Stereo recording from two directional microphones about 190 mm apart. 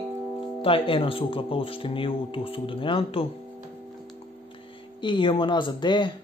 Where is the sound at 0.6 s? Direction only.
30° left (ahead or behind).